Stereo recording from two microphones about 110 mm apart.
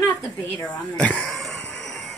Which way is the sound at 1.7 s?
5° left (ahead or behind).